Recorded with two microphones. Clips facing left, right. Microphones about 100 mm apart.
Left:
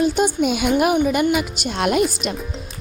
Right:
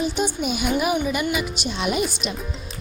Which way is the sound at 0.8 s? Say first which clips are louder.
Left 5 dB; 55° left (ahead or behind).